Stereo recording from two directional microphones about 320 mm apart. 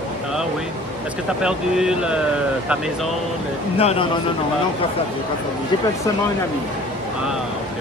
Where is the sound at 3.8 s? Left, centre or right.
Centre.